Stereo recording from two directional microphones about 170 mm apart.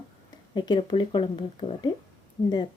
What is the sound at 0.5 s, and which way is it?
Speech, 25° left (ahead or behind).